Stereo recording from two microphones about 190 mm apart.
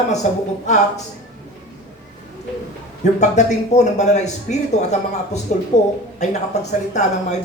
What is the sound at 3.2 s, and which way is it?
Speech, 40° left (ahead or behind).